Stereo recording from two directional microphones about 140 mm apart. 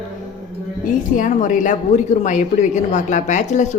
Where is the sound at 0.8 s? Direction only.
70° left (ahead or behind).